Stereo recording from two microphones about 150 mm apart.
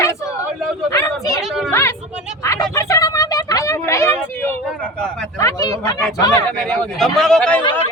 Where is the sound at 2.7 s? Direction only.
20° left (ahead or behind).